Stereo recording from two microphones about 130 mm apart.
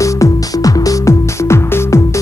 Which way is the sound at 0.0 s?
25° left (ahead or behind).